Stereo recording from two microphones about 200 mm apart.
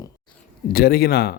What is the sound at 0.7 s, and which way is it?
Speech, 50° left (ahead or behind).